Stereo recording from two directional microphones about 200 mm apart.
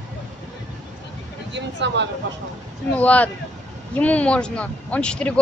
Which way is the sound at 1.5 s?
60° right (ahead or behind).